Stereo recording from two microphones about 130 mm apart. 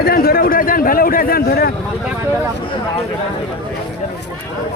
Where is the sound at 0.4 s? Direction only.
90° left.